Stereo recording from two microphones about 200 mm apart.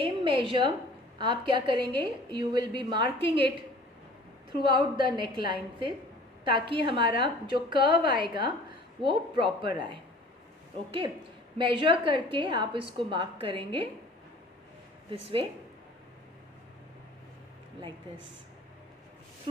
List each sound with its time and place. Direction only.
0.0 s a woman's voice: 25° right (ahead or behind)
4.6 s a woman's voice: 25° right (ahead or behind)
15.1 s a woman's voice: 25° right (ahead or behind)